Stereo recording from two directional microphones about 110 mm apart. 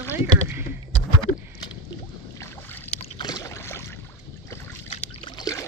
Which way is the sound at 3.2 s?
35° left (ahead or behind).